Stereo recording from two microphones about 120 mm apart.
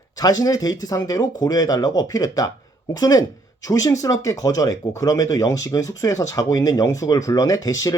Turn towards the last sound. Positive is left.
turn(degrees=30)  # may be behind; listen again after turning